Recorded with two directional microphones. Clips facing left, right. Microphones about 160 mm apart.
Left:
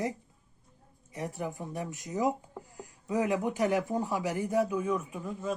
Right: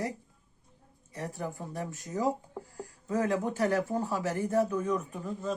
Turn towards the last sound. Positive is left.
turn(degrees=10)  # may be behind; listen again after turning